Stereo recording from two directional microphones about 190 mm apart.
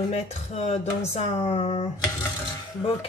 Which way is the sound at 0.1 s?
35° left (ahead or behind).